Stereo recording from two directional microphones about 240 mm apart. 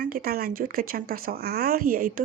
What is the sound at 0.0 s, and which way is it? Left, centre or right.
Speech, right.